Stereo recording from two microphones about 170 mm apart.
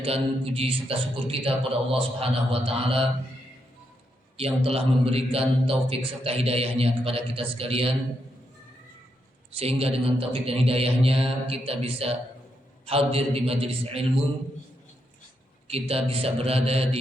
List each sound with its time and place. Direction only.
0.0 s a man's voice: 35° right (ahead or behind)
4.4 s a man's voice: 35° right (ahead or behind)
9.6 s a man's voice: 35° right (ahead or behind)
15.6 s a man's voice: 35° right (ahead or behind)